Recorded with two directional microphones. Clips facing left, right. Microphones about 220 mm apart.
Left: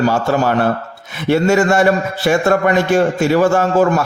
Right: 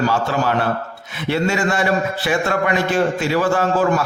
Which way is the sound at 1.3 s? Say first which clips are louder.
Left 7 dB; 45° left (ahead or behind).